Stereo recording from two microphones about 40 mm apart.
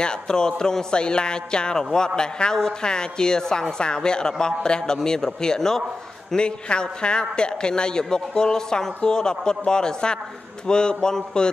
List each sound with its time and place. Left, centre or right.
0.0 s a man's voice: centre
6.3 s a man's voice: left